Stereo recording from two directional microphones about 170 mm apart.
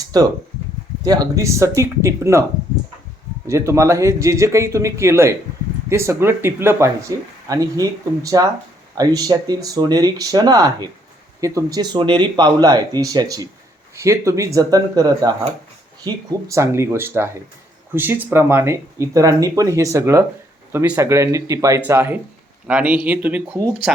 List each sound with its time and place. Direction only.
0.1 s speech: 25° right (ahead or behind)
3.4 s speech: 15° right (ahead or behind)